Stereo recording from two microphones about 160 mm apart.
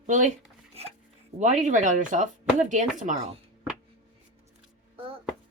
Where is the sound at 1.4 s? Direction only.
50° right (ahead or behind).